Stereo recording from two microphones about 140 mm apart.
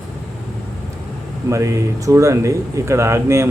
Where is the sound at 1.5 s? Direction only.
20° right (ahead or behind).